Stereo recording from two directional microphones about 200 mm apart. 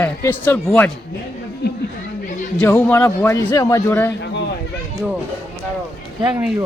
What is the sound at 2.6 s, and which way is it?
Speech, 10° left (ahead or behind).